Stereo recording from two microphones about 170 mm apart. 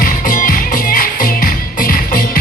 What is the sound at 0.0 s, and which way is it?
Music, 55° left (ahead or behind).